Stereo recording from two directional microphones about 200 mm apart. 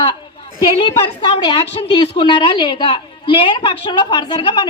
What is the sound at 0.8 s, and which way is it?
A woman's voice, 25° left (ahead or behind).